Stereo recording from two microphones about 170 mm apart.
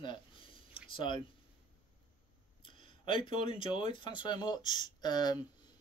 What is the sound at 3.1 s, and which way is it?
Speech, 30° left (ahead or behind).